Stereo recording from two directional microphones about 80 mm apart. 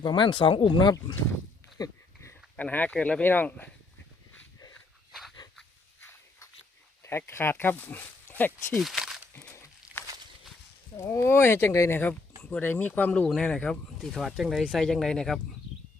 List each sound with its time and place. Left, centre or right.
0.0 s speech: left
2.3 s speech: centre
7.0 s speech: left
8.7 s speech: centre
11.0 s speech: left
12.4 s speech: left